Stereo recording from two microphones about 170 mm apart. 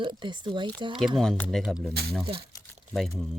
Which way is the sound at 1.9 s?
70° right (ahead or behind).